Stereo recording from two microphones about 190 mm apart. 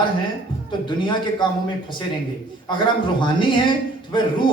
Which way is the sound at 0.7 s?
25° left (ahead or behind).